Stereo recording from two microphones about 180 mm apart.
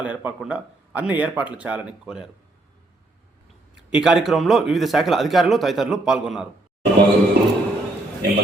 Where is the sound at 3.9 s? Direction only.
Centre (ahead or behind).